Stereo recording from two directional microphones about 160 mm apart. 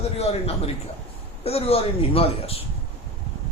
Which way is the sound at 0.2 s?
40° left (ahead or behind).